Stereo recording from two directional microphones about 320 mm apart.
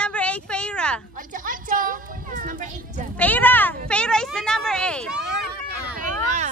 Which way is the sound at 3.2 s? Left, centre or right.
Centre.